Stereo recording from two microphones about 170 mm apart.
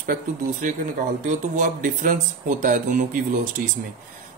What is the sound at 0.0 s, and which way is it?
Speech, 50° right (ahead or behind).